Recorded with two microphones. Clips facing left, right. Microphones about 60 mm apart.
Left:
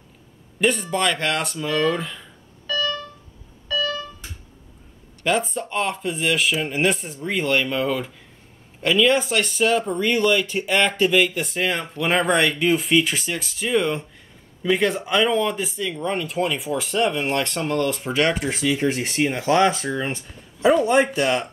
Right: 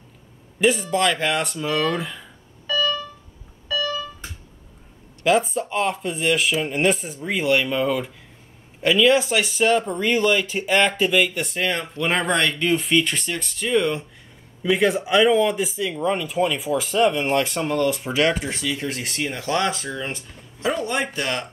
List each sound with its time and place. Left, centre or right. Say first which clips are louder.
0.6 s a man's voice: right 2 dB; centre
3.6 s fire alarm: even; centre
5.2 s speech: right 3 dB; centre
18.6 s speech: left 5 dB; left